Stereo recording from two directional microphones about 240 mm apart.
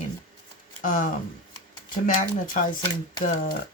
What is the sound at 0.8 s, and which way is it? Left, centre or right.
Speech, left.